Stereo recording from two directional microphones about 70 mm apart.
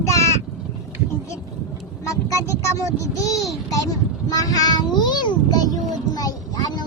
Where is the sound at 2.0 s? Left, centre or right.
Left.